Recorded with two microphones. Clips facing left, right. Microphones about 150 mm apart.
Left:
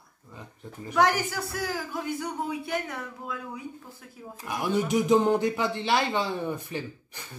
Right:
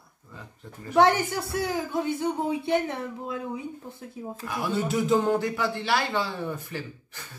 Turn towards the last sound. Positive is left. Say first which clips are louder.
# left 2 dB
turn(degrees=20)  # may be behind; listen again after turning